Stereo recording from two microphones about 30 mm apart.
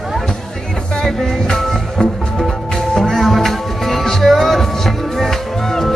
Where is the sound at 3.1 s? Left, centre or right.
Centre.